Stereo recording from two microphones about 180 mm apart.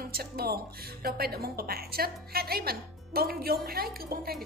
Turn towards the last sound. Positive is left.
turn(degrees=-60)  # may be behind; listen again after turning